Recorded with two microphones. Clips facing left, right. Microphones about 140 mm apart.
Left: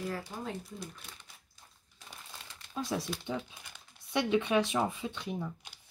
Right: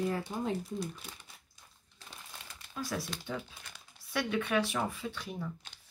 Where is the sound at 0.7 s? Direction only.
Centre (ahead or behind).